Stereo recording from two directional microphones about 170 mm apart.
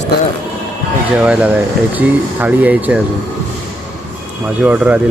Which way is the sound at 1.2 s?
5° right (ahead or behind).